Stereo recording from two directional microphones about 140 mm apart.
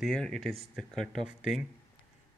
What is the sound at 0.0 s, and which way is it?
Speech, 5° left (ahead or behind).